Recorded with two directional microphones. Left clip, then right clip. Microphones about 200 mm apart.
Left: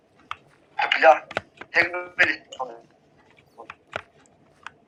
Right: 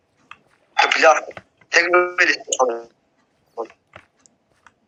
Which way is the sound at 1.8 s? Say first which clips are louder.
Right 7 dB; 55° right (ahead or behind).